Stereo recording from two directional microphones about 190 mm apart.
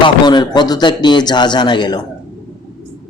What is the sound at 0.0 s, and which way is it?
A man's voice, 25° left (ahead or behind).